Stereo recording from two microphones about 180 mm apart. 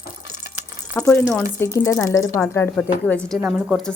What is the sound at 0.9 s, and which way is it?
A woman's voice, 10° left (ahead or behind).